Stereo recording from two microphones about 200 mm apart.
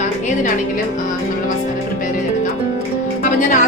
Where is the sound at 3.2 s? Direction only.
40° left (ahead or behind).